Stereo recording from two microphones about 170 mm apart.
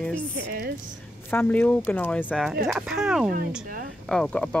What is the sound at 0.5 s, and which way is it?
Speech, 60° right (ahead or behind).